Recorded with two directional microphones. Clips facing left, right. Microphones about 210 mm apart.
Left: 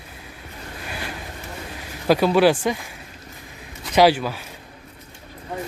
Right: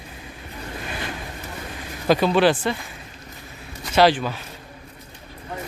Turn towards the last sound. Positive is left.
turn(degrees=10)  # may be behind; listen again after turning